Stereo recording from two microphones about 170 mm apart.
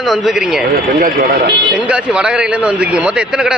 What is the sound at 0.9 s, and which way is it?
Speech, 55° right (ahead or behind).